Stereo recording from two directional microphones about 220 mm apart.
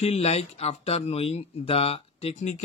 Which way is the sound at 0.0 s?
30° left (ahead or behind).